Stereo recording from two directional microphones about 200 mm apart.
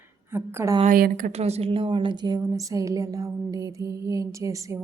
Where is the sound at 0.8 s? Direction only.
45° right (ahead or behind).